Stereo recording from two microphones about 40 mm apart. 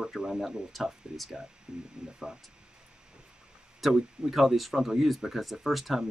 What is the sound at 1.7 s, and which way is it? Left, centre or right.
Speech, right.